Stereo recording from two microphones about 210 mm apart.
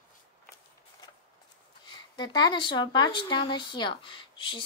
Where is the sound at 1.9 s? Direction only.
20° left (ahead or behind).